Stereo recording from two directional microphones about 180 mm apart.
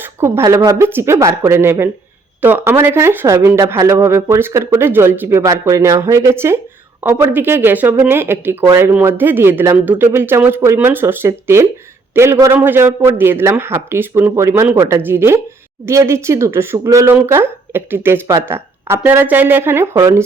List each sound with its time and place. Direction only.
0.0 s a woman's voice: 15° right (ahead or behind)